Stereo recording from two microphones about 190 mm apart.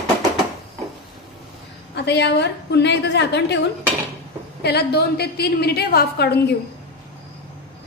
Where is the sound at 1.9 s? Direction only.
65° left (ahead or behind).